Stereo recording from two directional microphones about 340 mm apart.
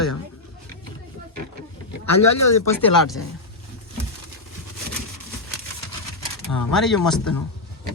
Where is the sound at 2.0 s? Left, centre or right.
Left.